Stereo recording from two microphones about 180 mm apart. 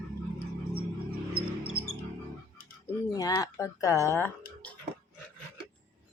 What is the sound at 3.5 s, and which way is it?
Speech, 15° left (ahead or behind).